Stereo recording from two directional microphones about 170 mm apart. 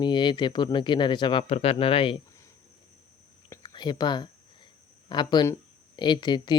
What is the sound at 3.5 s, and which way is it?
Whispering, 25° left (ahead or behind).